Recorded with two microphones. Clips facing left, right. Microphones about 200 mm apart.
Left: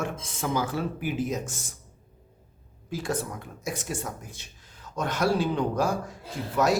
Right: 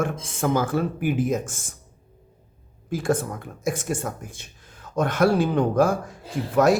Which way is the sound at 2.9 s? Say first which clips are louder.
Right 6 dB; 50° right (ahead or behind).